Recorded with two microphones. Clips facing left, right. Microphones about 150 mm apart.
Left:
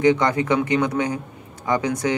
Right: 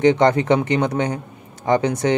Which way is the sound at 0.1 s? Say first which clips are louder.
Right 4 dB; 40° right (ahead or behind).